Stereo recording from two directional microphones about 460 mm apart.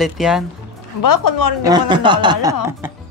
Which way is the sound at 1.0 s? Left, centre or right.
Left.